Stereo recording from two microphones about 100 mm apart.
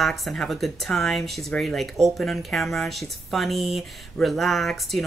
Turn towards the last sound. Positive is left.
turn(degrees=0)  # may be behind; listen again after turning